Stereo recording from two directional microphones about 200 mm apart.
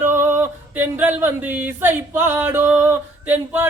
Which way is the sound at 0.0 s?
10° right (ahead or behind).